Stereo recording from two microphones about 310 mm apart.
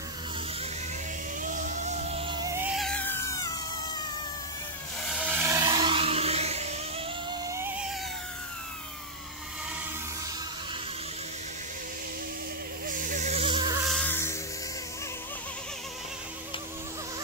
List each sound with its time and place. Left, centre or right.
1.4 s music: right; by 4.0 s centre
5.0 s music: centre
7.4 s a sound: centre
12.8 s mosquito: right
13.8 s music: centre